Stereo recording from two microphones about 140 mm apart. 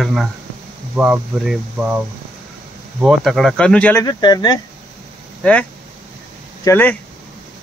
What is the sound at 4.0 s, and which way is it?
Speech, 30° left (ahead or behind).